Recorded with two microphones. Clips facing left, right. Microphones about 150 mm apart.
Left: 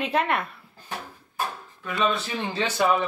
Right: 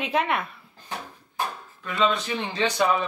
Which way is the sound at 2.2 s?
10° left (ahead or behind).